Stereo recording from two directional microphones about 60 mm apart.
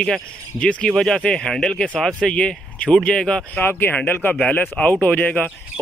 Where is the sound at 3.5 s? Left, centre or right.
Left.